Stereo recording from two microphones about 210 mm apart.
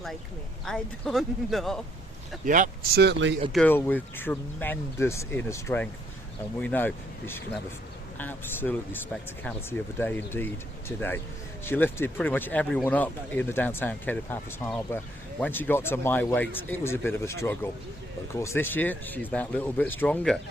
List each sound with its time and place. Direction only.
0.6 s speech: centre (ahead or behind)
2.5 s speech: 40° right (ahead or behind)
3.0 s speech: 60° right (ahead or behind)
3.5 s speech: 5° left (ahead or behind)